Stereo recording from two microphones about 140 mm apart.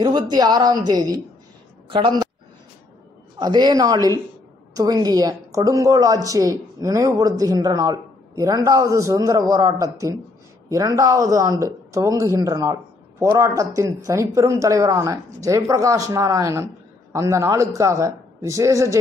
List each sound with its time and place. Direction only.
0.0 s a woman's voice: 30° right (ahead or behind)
3.3 s a woman's voice: 30° right (ahead or behind)